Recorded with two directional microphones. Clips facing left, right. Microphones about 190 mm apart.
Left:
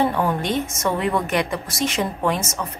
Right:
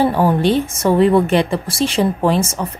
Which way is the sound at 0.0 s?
30° right (ahead or behind).